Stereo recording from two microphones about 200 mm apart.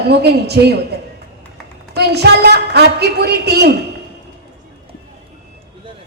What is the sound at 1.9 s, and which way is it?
A woman's voice, 55° right (ahead or behind).